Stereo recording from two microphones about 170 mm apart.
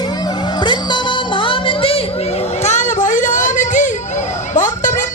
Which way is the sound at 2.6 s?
45° left (ahead or behind).